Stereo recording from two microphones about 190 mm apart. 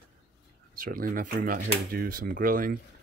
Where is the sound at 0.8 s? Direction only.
50° right (ahead or behind).